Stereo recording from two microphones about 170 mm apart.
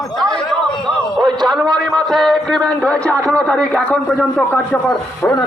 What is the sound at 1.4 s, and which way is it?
Speech, centre (ahead or behind).